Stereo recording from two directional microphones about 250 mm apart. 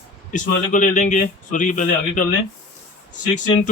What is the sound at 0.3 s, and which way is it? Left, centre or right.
Speech, left.